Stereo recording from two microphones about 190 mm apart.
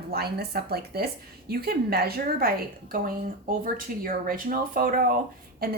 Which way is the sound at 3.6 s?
45° right (ahead or behind).